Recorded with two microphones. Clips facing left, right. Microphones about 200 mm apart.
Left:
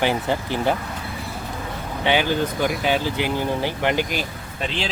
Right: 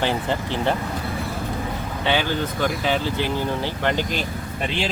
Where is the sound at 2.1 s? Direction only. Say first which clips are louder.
Left 2 dB; 15° left (ahead or behind).